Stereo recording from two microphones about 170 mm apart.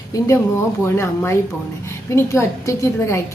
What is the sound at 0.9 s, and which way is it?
A woman's voice, 15° left (ahead or behind).